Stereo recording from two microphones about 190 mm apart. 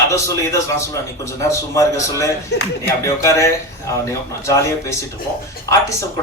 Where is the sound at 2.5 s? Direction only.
60° left (ahead or behind).